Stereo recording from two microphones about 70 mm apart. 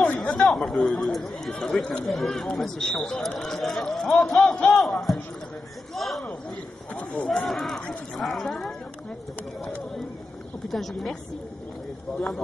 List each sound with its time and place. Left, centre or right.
0.2 s speech: centre
5.9 s a sound: centre
6.9 s speech: centre
10.7 s speech: centre